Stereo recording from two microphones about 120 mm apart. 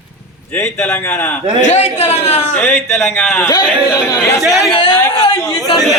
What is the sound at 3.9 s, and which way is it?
Speech, 25° left (ahead or behind).